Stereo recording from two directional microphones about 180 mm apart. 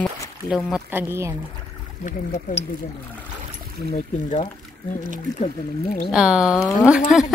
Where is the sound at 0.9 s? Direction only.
15° right (ahead or behind).